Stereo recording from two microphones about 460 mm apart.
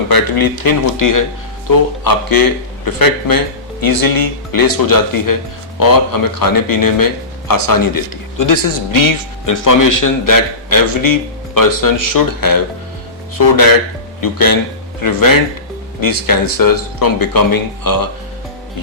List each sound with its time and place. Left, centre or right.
0.1 s speech: left
14.2 s speech: left